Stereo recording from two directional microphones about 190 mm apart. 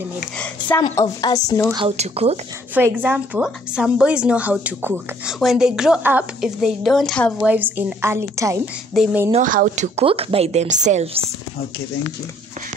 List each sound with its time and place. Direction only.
0.4 s a sound: 10° left (ahead or behind)
0.9 s a woman's voice: 20° left (ahead or behind)
1.7 s a woman's voice: 25° right (ahead or behind)
2.7 s a woman's voice: 10° right (ahead or behind)
7.4 s a woman's voice: 10° right (ahead or behind)
8.9 s a woman's voice: centre (ahead or behind)
9.3 s a woman's voice: 45° right (ahead or behind)